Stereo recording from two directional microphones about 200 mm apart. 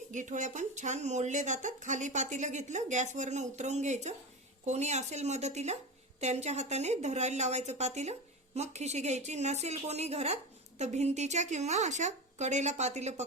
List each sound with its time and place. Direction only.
0.1 s speech: 40° right (ahead or behind)